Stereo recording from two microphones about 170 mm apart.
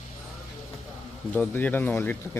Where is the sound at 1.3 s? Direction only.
10° left (ahead or behind).